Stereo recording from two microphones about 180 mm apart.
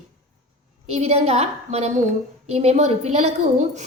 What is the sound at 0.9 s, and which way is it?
A woman's voice, 35° right (ahead or behind).